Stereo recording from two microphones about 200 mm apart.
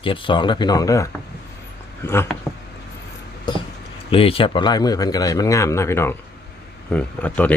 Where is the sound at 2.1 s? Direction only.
10° left (ahead or behind).